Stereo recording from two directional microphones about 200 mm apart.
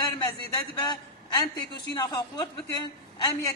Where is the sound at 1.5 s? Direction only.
20° left (ahead or behind).